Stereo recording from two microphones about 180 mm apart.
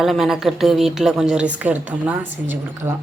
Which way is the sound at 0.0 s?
Centre (ahead or behind).